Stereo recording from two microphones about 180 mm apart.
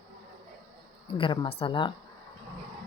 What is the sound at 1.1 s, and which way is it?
Speech, 25° left (ahead or behind).